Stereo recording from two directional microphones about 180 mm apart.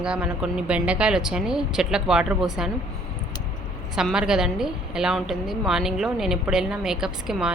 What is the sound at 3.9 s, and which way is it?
A woman's voice, 5° right (ahead or behind).